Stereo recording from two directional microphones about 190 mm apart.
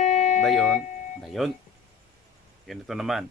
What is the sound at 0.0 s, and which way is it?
Music, 40° left (ahead or behind).